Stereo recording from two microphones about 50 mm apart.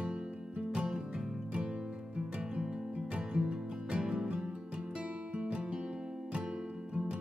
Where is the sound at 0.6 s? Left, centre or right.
Centre.